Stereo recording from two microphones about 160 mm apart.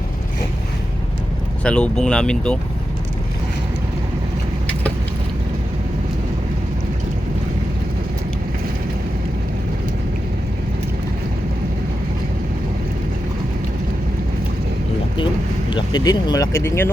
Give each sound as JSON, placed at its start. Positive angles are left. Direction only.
{"t": 1.6, "sound": "speech", "side_deg": 5}
{"t": 15.7, "sound": "speech", "side_deg": 25}